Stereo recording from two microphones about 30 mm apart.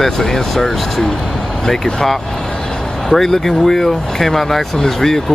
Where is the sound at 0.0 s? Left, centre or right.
Centre.